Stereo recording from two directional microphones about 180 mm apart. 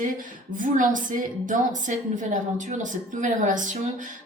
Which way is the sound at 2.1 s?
45° right (ahead or behind).